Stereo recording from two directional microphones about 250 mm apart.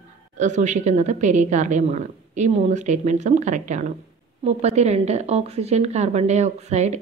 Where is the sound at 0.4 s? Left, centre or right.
Right.